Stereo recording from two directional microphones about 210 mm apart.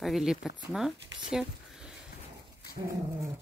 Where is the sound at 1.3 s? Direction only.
5° right (ahead or behind).